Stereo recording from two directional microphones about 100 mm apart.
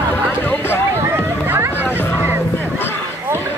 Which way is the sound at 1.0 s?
25° right (ahead or behind).